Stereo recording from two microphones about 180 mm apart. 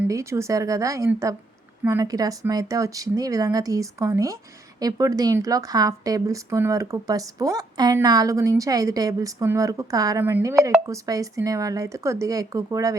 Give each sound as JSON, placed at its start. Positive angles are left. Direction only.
{"t": 0.0, "sound": "a woman's voice", "side_deg": -15}